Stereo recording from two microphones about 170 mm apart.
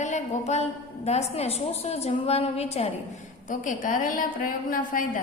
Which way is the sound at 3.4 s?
50° left (ahead or behind).